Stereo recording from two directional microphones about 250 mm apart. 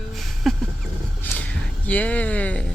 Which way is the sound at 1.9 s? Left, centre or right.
Centre.